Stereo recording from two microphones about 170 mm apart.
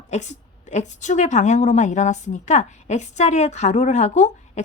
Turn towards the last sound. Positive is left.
turn(degrees=45)  # may be behind; listen again after turning